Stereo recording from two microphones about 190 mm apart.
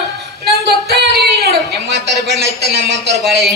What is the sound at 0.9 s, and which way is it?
Singing, 55° right (ahead or behind).